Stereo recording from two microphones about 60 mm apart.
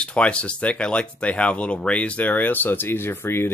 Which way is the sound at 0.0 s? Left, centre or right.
Centre.